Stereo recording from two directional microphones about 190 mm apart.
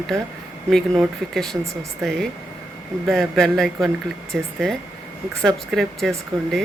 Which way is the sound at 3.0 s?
Centre (ahead or behind).